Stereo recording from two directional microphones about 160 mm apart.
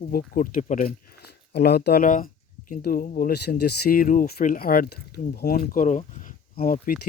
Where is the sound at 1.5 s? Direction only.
90° left; by 3.3 s 55° left (ahead or behind).